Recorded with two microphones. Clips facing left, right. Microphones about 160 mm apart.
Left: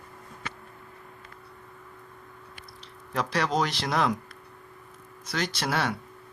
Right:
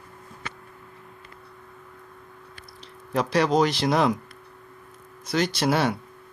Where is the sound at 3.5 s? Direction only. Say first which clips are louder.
Right 5 dB; 10° right (ahead or behind).